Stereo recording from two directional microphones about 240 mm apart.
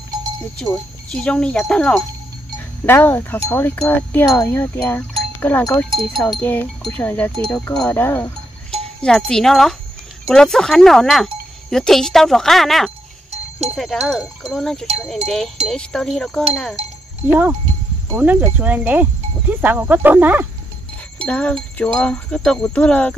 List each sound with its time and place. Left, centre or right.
1.1 s speech: centre
8.7 s a sound: centre
10.2 s speech: centre
13.3 s sheep: right
13.7 s speech: centre
16.8 s livestock: right
17.3 s speech: centre
21.3 s speech: centre